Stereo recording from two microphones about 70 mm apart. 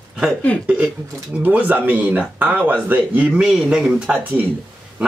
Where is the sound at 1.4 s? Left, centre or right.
Right.